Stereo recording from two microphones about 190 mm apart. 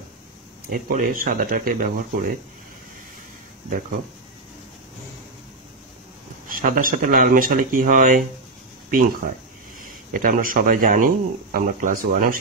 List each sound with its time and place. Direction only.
0.7 s speech: 45° right (ahead or behind)
6.5 s speech: 45° right (ahead or behind)
10.1 s speech: 45° right (ahead or behind)